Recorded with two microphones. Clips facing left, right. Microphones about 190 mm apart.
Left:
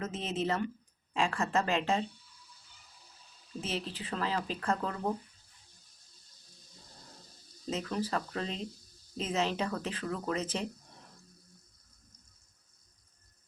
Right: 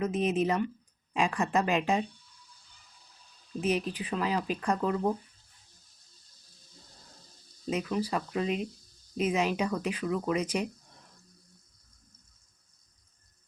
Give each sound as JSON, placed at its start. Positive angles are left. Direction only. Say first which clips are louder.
{"t": 0.0, "sound": "speech", "louder": "right 7 dB", "side_deg": -15}
{"t": 3.6, "sound": "speech", "louder": "right 8 dB", "side_deg": -15}
{"t": 7.7, "sound": "speech", "louder": "right 3 dB", "side_deg": -10}